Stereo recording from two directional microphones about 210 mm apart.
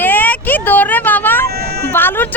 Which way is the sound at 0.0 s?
10° left (ahead or behind).